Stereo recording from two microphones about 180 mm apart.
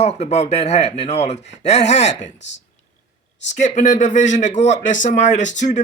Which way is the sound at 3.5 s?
40° left (ahead or behind).